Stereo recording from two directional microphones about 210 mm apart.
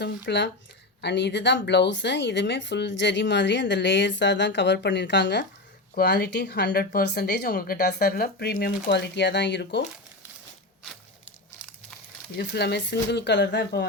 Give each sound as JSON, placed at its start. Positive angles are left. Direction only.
{"t": 0.0, "sound": "speech", "side_deg": 55}
{"t": 12.4, "sound": "speech", "side_deg": 55}